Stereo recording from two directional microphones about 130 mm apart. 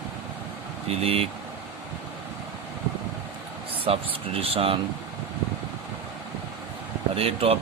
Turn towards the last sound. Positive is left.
turn(degrees=-50)  # may be behind; listen again after turning